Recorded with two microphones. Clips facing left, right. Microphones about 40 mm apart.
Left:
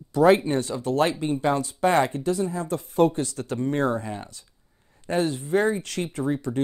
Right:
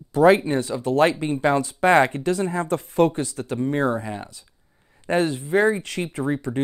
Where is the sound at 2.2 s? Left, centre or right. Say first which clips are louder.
Right 3 dB; right.